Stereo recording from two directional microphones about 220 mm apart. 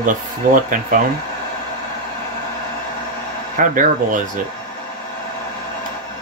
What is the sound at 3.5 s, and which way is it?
Speech, 35° right (ahead or behind).